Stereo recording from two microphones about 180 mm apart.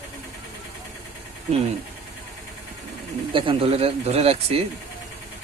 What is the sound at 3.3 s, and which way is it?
Speech, 30° right (ahead or behind).